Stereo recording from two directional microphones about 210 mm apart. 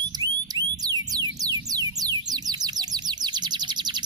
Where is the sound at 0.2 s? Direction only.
20° right (ahead or behind).